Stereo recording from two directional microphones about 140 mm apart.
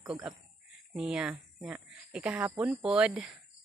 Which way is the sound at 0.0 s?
5° right (ahead or behind).